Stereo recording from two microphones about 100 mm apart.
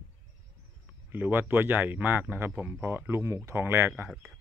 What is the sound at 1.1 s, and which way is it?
Speech, 20° right (ahead or behind).